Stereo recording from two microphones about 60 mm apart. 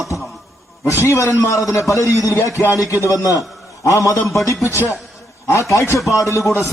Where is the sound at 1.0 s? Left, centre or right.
Left.